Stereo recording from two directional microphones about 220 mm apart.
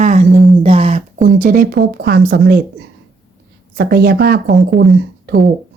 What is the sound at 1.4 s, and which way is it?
Speech, 40° right (ahead or behind).